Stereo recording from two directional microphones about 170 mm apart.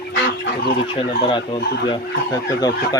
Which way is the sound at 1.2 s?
30° left (ahead or behind).